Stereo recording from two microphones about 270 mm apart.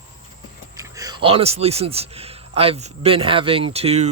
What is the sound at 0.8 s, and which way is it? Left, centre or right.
A man's voice, centre.